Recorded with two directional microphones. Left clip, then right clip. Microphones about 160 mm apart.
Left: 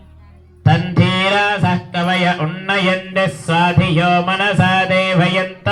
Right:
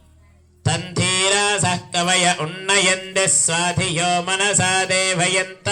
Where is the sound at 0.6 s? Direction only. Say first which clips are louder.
Left 5 dB; 35° right (ahead or behind).